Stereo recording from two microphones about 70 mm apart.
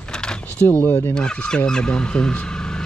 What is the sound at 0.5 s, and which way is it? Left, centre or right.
Speech, left.